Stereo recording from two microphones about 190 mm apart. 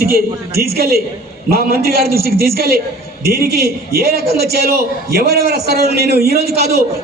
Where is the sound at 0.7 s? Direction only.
55° right (ahead or behind).